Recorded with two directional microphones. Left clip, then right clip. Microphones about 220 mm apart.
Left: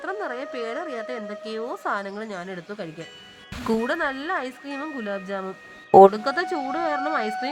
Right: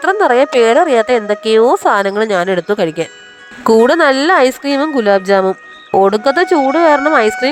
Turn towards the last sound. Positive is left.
turn(degrees=-35)  # may be behind; listen again after turning